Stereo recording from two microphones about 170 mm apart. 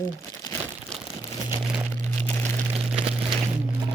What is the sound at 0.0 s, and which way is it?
Crumpling, 15° left (ahead or behind).